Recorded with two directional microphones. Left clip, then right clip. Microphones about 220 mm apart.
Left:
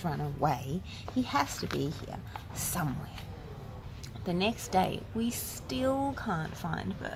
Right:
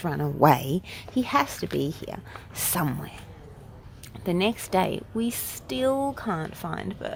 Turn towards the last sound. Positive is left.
turn(degrees=-40)  # may be behind; listen again after turning